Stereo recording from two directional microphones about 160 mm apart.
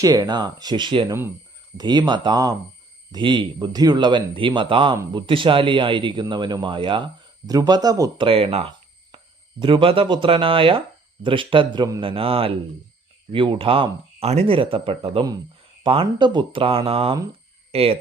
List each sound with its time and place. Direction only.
0.0 s speech: 25° right (ahead or behind)
8.3 s speech: 35° right (ahead or behind)